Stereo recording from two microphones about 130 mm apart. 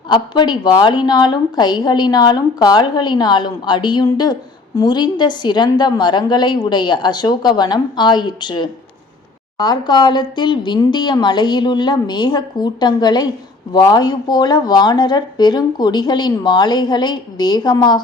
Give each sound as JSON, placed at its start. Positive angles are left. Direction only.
{"t": 0.1, "sound": "a woman's voice", "side_deg": 35}